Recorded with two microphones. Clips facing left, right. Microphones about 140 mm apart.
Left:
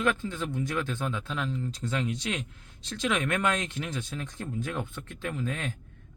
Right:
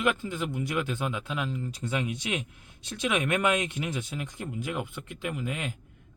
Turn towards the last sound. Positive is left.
turn(degrees=-15)  # may be behind; listen again after turning